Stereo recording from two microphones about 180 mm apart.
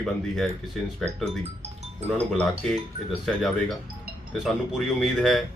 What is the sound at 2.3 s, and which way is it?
Speech, centre (ahead or behind).